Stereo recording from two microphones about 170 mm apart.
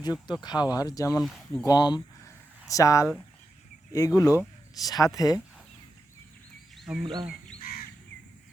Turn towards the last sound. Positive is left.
turn(degrees=60)  # may be behind; listen again after turning